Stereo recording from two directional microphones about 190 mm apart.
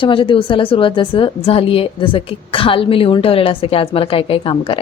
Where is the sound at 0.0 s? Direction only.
25° left (ahead or behind).